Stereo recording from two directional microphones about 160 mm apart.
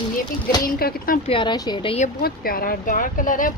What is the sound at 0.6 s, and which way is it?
Speech, 65° left (ahead or behind).